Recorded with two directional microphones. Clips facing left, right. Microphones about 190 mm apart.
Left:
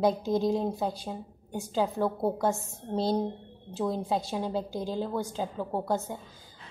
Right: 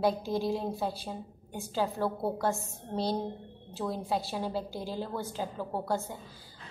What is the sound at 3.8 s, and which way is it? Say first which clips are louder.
A woman's voice: left 3 dB; 20° left (ahead or behind).